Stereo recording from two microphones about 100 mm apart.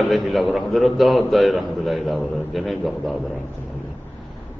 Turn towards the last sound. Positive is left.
turn(degrees=0)  # may be behind; listen again after turning